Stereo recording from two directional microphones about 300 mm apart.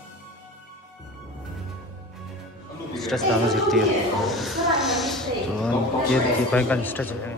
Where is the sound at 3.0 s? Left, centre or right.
Centre.